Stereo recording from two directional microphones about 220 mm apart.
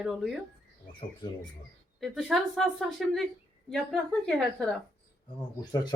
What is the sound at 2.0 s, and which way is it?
A woman's voice, centre (ahead or behind).